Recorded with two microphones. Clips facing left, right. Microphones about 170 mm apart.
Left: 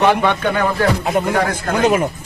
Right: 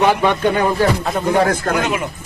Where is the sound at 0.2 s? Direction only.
15° right (ahead or behind).